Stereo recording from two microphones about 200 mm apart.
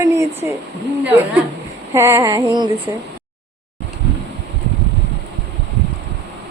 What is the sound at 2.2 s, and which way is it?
Female singing, 20° right (ahead or behind).